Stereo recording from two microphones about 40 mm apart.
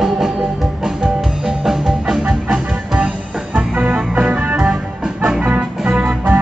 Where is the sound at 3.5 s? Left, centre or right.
Right.